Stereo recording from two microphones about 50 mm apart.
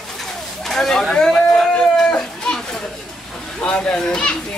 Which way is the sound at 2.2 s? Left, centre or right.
Centre.